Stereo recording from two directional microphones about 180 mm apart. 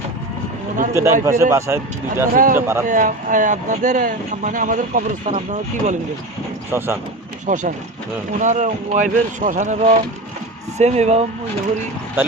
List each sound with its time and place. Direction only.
1.2 s speech: 15° right (ahead or behind)
2.3 s speech: 50° right (ahead or behind)
2.6 s speech: 15° right (ahead or behind)
2.8 s speech: 45° right (ahead or behind)
6.7 s speech: 10° right (ahead or behind)
7.4 s speech: 45° right (ahead or behind)